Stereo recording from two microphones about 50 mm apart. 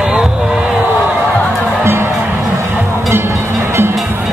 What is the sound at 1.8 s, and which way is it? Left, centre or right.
Music, right.